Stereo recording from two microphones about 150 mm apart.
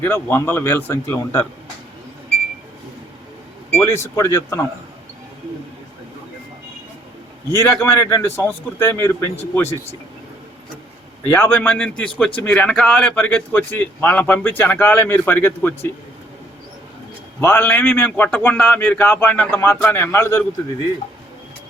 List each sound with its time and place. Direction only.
0.0 s a man's voice: 15° left (ahead or behind)
3.7 s a man's voice: 10° left (ahead or behind)
3.9 s a man's voice: 20° left (ahead or behind)
7.5 s a man's voice: 15° left (ahead or behind)
11.3 s a man's voice: 15° left (ahead or behind)
17.4 s a man's voice: 15° left (ahead or behind)